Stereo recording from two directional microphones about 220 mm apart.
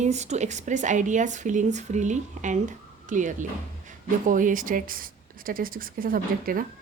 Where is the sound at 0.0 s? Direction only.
30° right (ahead or behind).